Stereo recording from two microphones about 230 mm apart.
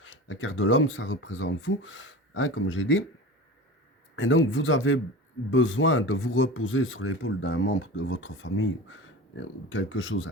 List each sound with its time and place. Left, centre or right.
0.0 s speech: left
4.1 s speech: left